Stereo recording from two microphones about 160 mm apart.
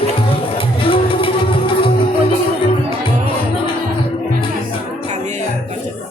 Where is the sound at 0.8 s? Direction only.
35° left (ahead or behind).